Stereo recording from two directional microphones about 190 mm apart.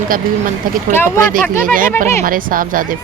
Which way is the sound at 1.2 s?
45° right (ahead or behind).